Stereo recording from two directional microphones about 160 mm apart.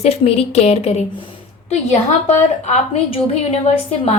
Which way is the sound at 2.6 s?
45° left (ahead or behind).